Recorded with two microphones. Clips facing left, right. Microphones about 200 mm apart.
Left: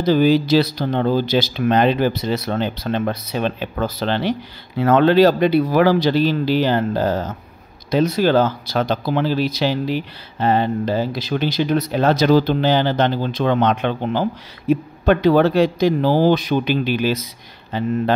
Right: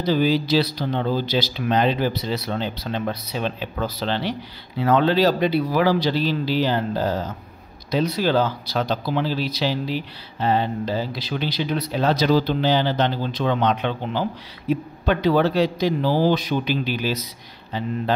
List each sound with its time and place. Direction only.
0.0 s speech: 50° left (ahead or behind)